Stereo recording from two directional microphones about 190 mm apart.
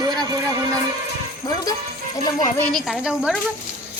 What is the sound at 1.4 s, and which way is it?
Speech, 20° left (ahead or behind).